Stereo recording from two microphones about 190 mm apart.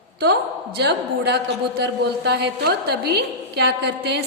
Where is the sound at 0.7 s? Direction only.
60° right (ahead or behind).